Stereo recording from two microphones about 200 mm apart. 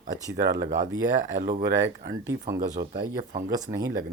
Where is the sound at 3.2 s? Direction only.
40° right (ahead or behind).